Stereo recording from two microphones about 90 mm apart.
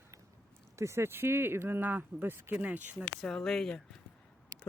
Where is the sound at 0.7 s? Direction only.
30° right (ahead or behind).